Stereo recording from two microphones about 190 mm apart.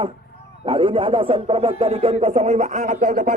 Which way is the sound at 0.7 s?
30° right (ahead or behind).